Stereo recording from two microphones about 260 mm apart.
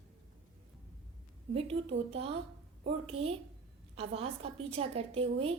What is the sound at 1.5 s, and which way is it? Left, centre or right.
A woman's voice, right.